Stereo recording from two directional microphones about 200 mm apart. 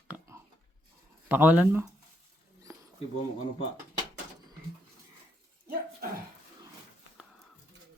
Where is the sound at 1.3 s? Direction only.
10° right (ahead or behind).